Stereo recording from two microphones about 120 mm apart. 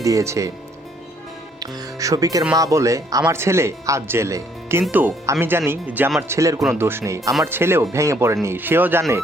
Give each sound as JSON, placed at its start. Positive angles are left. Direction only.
{"t": 0.0, "sound": "speech", "side_deg": -25}
{"t": 1.5, "sound": "speech", "side_deg": -30}